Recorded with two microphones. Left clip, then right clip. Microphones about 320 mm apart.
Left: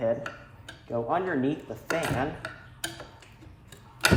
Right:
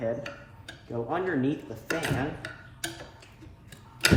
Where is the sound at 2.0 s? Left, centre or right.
Centre.